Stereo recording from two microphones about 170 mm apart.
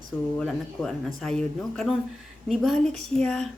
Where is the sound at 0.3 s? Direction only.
5° left (ahead or behind).